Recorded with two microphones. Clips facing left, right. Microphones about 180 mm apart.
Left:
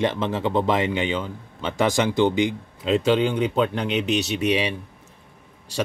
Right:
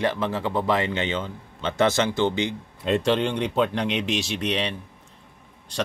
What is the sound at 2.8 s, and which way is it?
Speech, centre (ahead or behind).